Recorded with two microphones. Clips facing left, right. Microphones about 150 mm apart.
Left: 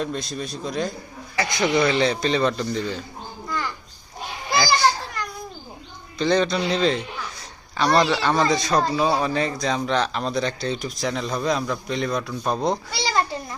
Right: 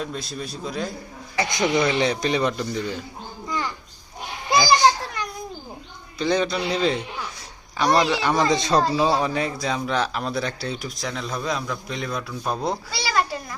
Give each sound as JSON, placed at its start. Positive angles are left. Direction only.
{"t": 0.0, "sound": "speech", "side_deg": -5}
{"t": 1.4, "sound": "a man's voice", "side_deg": -15}
{"t": 4.5, "sound": "a child's voice", "side_deg": -15}
{"t": 6.1, "sound": "a man's voice", "side_deg": -10}
{"t": 9.1, "sound": "speech", "side_deg": -15}
{"t": 13.0, "sound": "children playing", "side_deg": 25}